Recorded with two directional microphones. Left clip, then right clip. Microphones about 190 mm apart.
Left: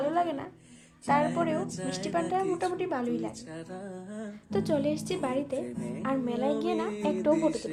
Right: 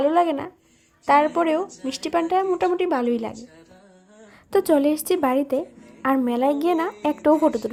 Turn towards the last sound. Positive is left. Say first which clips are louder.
# right 8 dB
turn(degrees=-35)  # may be behind; listen again after turning